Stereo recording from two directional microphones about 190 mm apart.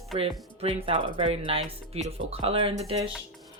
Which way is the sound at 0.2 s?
30° right (ahead or behind).